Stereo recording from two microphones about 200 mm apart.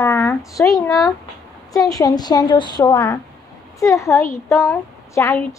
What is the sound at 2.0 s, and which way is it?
A woman's voice, 20° left (ahead or behind).